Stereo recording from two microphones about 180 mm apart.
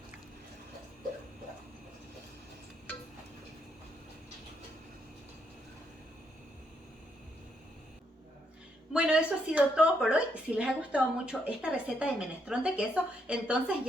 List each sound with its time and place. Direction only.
8.9 s a woman's voice: 5° right (ahead or behind)